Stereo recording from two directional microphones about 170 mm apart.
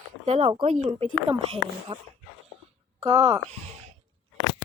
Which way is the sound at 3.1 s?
20° right (ahead or behind).